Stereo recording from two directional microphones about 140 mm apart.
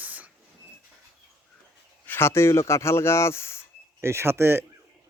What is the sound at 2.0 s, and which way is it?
Speech, 15° left (ahead or behind).